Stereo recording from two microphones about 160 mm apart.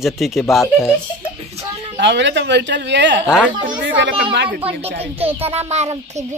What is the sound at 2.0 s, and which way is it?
Speech, 90° right.